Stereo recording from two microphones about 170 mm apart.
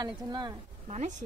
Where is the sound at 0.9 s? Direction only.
45° right (ahead or behind).